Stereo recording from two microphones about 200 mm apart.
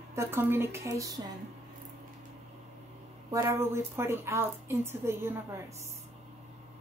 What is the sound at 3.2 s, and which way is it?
A woman's voice, 15° right (ahead or behind).